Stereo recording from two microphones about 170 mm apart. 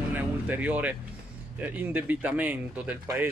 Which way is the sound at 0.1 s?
10° right (ahead or behind).